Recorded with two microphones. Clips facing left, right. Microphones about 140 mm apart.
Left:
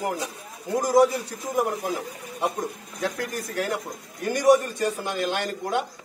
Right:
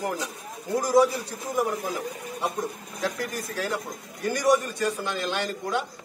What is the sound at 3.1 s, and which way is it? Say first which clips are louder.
A man's voice: left 2 dB; 55° left (ahead or behind).